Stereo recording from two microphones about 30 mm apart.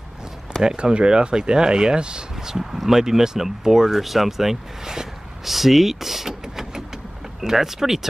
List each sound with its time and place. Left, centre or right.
0.7 s speech: right
2.4 s speech: centre